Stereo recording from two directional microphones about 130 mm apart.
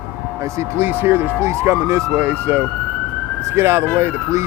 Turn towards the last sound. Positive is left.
turn(degrees=-15)  # may be behind; listen again after turning